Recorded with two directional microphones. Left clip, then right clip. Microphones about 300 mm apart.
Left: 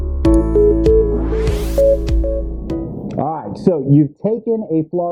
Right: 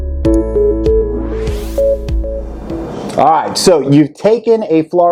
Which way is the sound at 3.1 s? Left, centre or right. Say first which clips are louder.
Right 13 dB; centre.